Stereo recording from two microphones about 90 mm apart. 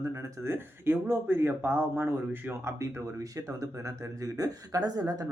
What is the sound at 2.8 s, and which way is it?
Speech, 35° right (ahead or behind).